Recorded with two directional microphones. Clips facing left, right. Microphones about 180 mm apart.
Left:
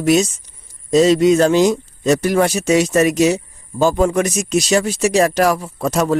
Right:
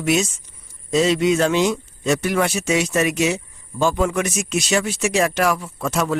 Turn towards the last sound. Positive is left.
turn(degrees=40)  # may be behind; listen again after turning